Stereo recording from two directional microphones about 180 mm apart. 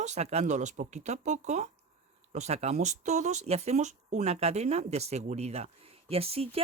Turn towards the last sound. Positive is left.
turn(degrees=-35)  # may be behind; listen again after turning